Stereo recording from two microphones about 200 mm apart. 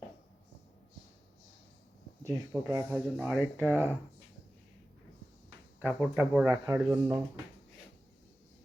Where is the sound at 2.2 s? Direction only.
15° right (ahead or behind).